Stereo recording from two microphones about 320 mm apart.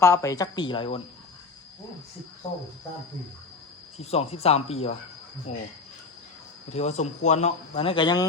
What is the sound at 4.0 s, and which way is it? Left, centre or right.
Speech, centre.